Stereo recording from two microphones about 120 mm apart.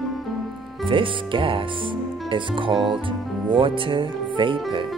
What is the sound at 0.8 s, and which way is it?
Speech, 45° right (ahead or behind).